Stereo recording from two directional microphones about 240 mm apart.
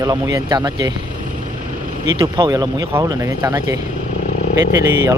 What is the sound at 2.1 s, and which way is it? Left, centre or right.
Speech, centre.